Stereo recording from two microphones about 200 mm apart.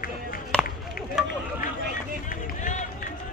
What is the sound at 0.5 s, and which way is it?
Chop, 5° left (ahead or behind).